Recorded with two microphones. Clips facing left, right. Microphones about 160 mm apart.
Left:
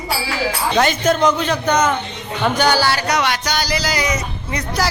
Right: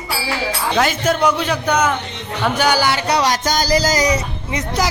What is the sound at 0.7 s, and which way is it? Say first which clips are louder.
A man's voice: left 1 dB; 5° right (ahead or behind).